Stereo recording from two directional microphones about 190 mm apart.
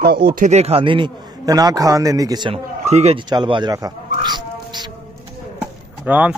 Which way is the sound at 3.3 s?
25° right (ahead or behind).